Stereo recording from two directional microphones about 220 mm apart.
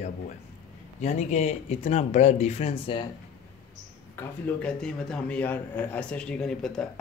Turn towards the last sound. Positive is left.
turn(degrees=0)  # may be behind; listen again after turning